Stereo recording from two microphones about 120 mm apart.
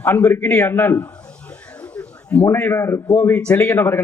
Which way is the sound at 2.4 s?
20° left (ahead or behind).